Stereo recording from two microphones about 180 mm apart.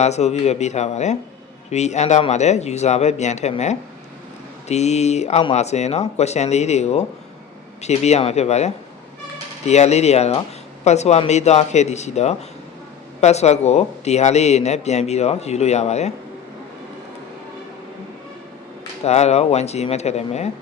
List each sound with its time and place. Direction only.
0.0 s a man's voice: 40° left (ahead or behind)
19.0 s a man's voice: 35° left (ahead or behind)